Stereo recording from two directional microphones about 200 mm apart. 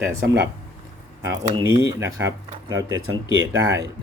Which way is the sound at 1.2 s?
15° right (ahead or behind).